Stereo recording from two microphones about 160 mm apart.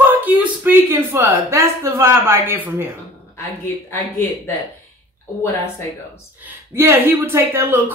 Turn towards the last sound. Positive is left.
turn(degrees=-15)  # may be behind; listen again after turning